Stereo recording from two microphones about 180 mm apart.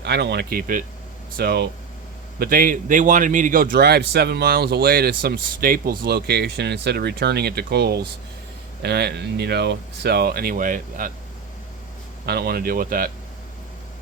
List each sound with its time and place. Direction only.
0.0 s speech: 70° right (ahead or behind)
2.4 s speech: 50° right (ahead or behind)
12.2 s speech: 60° right (ahead or behind)